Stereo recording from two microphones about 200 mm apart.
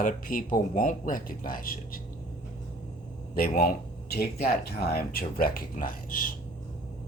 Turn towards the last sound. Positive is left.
turn(degrees=45)  # may be behind; listen again after turning